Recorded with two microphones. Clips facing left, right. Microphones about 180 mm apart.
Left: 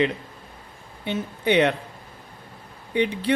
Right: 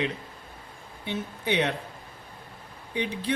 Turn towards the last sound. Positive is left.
turn(degrees=65)  # may be behind; listen again after turning